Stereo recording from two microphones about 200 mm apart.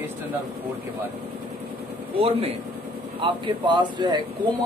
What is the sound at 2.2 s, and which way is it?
Speech, 30° right (ahead or behind).